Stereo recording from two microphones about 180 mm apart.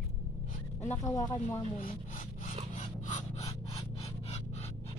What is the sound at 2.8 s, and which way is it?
Filing, 40° left (ahead or behind).